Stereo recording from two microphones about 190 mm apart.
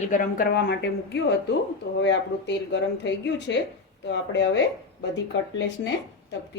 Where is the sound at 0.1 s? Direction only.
45° left (ahead or behind); by 5.9 s 65° left (ahead or behind).